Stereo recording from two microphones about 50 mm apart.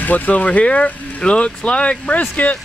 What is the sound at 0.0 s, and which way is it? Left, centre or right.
Speech, left.